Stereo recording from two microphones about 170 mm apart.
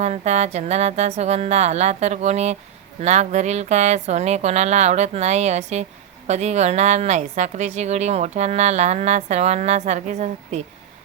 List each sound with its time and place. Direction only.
0.0 s a woman's voice: 40° right (ahead or behind)